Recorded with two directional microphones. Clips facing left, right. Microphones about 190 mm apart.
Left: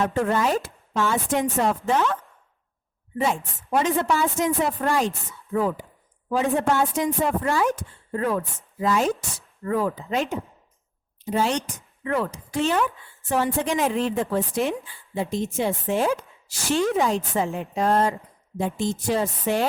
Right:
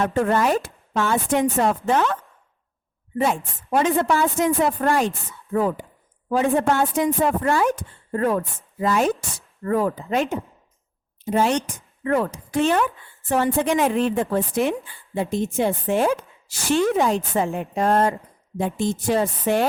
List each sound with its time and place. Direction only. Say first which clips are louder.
0.0 s speech: right 2 dB; 55° right (ahead or behind)
3.7 s a woman's voice: right 2 dB; 55° right (ahead or behind)